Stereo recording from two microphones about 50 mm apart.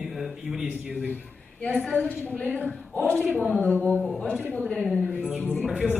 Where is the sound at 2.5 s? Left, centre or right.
Left.